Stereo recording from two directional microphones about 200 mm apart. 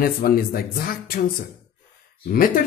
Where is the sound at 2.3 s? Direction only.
45° left (ahead or behind).